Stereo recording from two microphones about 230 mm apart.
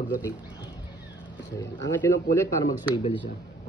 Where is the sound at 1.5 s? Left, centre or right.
Centre.